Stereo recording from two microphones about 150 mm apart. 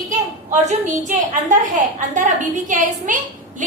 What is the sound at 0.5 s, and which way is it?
A woman's voice, 55° right (ahead or behind).